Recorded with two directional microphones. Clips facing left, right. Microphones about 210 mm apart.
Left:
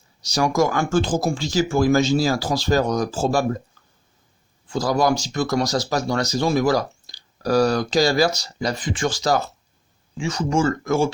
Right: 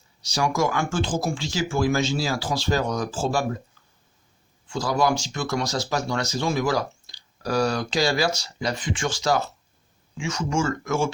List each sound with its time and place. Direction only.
0.2 s speech: 40° left (ahead or behind)
4.7 s speech: 40° left (ahead or behind)